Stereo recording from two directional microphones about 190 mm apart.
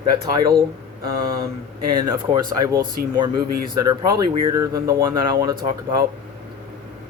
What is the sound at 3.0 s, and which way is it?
Speech, 50° right (ahead or behind).